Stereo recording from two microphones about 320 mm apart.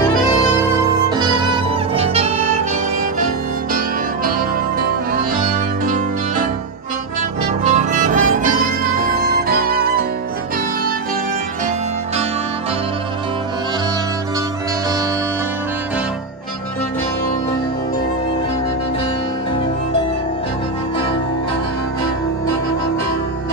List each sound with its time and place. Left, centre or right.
1.1 s music: centre
7.6 s music: right